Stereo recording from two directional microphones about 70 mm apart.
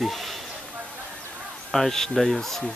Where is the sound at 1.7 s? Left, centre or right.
Centre.